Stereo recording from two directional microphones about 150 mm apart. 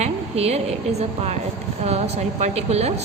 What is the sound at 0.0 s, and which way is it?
A woman's voice, 45° right (ahead or behind).